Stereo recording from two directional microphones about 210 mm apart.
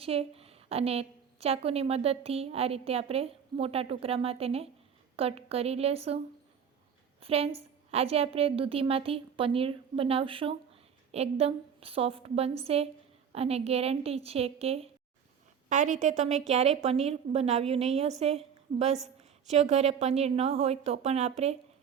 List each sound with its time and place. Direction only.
0.0 s a woman's voice: 30° right (ahead or behind)